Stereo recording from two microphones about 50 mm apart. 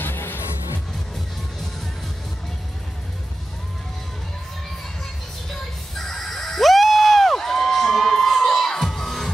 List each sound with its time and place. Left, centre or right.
0.0 s music: left
5.5 s music: centre